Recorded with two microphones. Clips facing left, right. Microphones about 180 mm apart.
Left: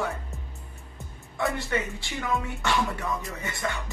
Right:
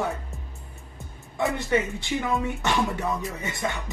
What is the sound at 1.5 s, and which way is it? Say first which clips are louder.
Speech: right 5 dB; 20° right (ahead or behind).